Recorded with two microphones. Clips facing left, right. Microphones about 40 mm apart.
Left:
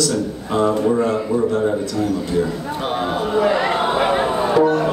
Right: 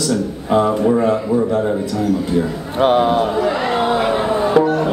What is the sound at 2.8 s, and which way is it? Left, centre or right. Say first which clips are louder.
Speech: right 10 dB; right.